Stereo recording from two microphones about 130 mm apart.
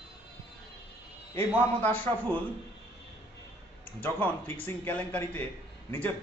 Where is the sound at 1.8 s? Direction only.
15° left (ahead or behind).